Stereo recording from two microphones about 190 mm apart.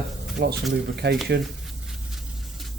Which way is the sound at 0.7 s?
60° right (ahead or behind).